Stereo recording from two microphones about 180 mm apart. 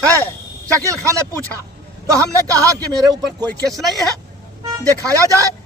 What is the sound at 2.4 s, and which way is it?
Speech, 15° right (ahead or behind).